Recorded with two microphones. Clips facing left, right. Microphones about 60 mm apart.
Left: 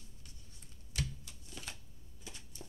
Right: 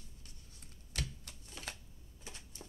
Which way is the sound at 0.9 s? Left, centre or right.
Right.